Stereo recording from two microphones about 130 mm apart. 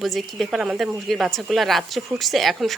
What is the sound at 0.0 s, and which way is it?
Speech, centre (ahead or behind).